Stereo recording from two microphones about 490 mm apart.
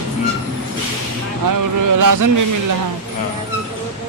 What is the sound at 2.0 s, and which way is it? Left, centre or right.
Speech, right.